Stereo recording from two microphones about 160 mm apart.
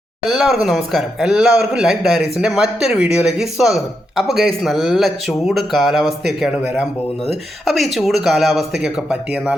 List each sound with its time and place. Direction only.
0.3 s speech: centre (ahead or behind)